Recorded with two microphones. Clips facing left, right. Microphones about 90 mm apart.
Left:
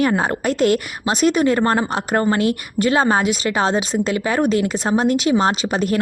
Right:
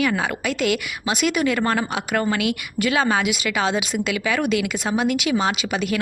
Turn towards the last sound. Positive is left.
turn(degrees=40)  # may be behind; listen again after turning